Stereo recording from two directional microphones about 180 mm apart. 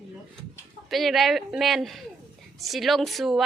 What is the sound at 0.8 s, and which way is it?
A woman's voice, centre (ahead or behind).